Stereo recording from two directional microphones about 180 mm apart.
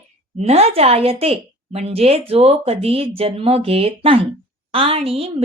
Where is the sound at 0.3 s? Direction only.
35° right (ahead or behind).